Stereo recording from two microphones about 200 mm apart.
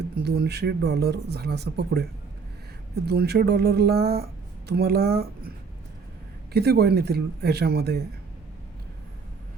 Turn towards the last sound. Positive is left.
turn(degrees=-55)  # may be behind; listen again after turning